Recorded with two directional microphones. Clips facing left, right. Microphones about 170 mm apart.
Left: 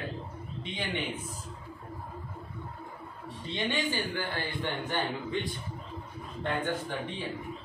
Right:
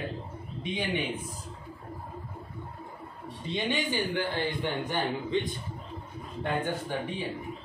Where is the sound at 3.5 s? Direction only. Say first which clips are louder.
Right 2 dB; 15° right (ahead or behind).